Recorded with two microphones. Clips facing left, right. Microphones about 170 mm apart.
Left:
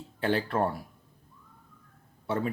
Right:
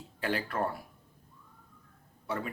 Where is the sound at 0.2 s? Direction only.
30° left (ahead or behind).